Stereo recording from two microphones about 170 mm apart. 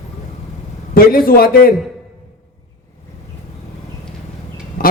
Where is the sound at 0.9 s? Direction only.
60° left (ahead or behind).